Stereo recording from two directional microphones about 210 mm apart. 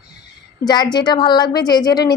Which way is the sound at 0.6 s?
20° left (ahead or behind).